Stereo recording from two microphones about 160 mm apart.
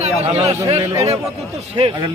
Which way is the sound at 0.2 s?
40° right (ahead or behind).